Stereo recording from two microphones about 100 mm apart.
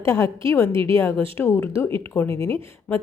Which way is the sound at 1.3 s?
25° left (ahead or behind).